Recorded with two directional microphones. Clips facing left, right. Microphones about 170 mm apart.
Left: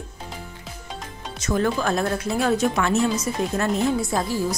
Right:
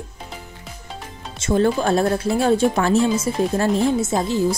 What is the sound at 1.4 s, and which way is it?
Speech, 30° right (ahead or behind).